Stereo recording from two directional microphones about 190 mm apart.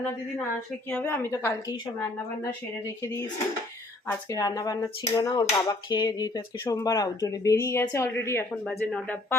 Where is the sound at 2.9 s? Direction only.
15° left (ahead or behind).